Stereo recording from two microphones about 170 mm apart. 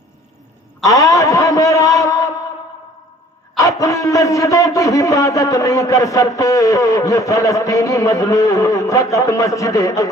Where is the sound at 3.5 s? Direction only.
20° left (ahead or behind).